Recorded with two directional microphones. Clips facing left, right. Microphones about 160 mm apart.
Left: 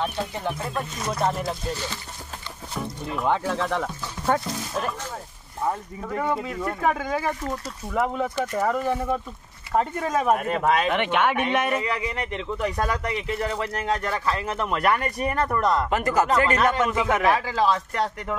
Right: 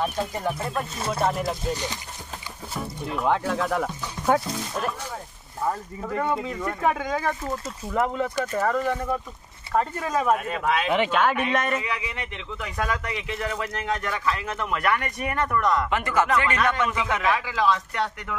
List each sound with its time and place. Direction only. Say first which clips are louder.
0.0 s speech: right 1 dB; 5° right (ahead or behind)
0.9 s speech: right 1 dB; 30° right (ahead or behind)
1.2 s speech: even; centre (ahead or behind)
1.7 s speech: right 2 dB; 15° right (ahead or behind)
2.7 s speech: even; centre (ahead or behind)
10.3 s speech: left 2 dB; 45° left (ahead or behind)
11.1 s speech: even; 5° left (ahead or behind)
11.8 s speech: left 4 dB; 40° left (ahead or behind)